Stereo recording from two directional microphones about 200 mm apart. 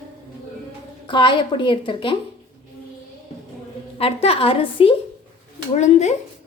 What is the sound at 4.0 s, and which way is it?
A woman's voice, 30° left (ahead or behind).